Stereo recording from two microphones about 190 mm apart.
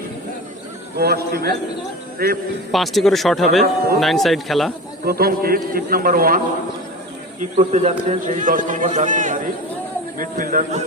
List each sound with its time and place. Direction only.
0.9 s a man's voice: 55° right (ahead or behind)
2.7 s speech: centre (ahead or behind)
5.0 s speech: 50° right (ahead or behind)
7.5 s a man's voice: 35° right (ahead or behind)